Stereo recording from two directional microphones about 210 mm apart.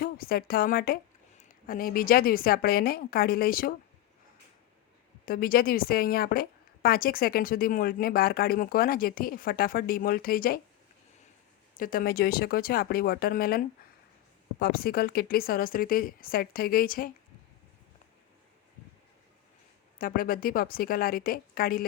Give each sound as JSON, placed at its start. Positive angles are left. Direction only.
{"t": 0.0, "sound": "a woman's voice", "side_deg": 45}
{"t": 5.2, "sound": "a woman's voice", "side_deg": 45}
{"t": 11.8, "sound": "a woman's voice", "side_deg": 45}
{"t": 20.0, "sound": "a woman's voice", "side_deg": 40}